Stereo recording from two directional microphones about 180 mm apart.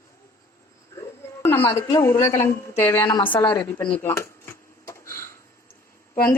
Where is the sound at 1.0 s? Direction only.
15° left (ahead or behind).